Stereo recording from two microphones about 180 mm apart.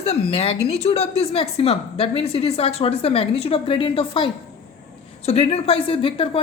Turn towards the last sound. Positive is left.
turn(degrees=30)  # may be behind; listen again after turning